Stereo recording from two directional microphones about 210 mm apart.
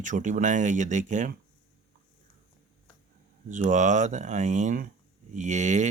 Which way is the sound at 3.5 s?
35° right (ahead or behind).